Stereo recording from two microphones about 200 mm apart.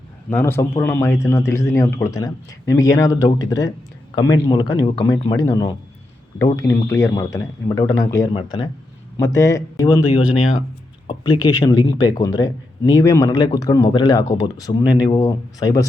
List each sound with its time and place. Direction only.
0.3 s speech: 10° left (ahead or behind)